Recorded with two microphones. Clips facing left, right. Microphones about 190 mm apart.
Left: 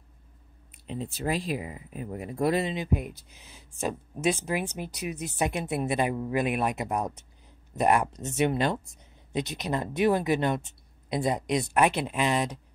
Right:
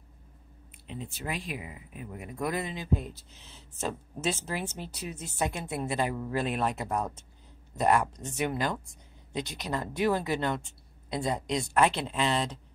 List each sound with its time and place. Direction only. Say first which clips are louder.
0.8 s speech: left 6 dB; 35° left (ahead or behind); by 12.5 s 15° left (ahead or behind)